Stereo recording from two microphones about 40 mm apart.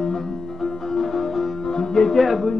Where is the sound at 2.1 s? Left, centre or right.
Centre.